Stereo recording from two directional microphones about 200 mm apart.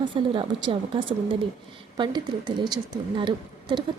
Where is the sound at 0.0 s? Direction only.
25° right (ahead or behind).